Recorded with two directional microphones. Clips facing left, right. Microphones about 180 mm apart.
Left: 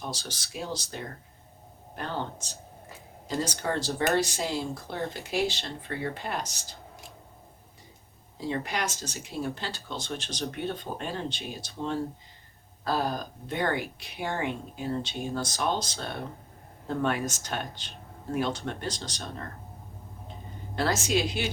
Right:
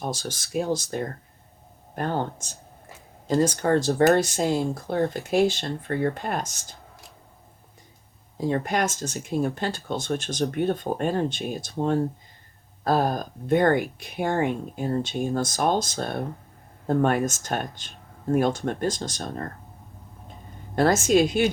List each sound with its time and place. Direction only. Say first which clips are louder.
0.0 s speech: right 7 dB; 50° right (ahead or behind)
8.4 s speech: right 7 dB; 50° right (ahead or behind)
20.7 s speech: right 8 dB; 50° right (ahead or behind)